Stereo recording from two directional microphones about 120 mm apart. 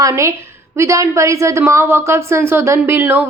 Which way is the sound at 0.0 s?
25° right (ahead or behind).